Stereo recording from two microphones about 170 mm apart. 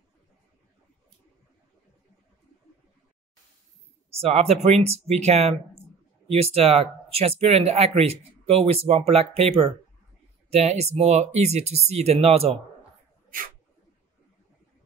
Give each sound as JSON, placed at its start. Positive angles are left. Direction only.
{"t": 4.2, "sound": "speech", "side_deg": -40}